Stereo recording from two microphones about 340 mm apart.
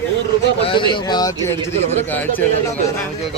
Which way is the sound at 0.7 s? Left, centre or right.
Centre.